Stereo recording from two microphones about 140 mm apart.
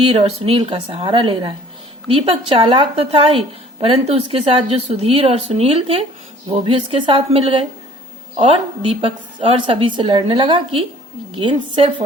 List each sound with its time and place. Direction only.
0.0 s a woman's voice: 45° right (ahead or behind)